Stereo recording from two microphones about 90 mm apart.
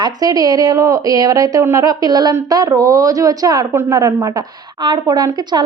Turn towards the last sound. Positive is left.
turn(degrees=-50)  # may be behind; listen again after turning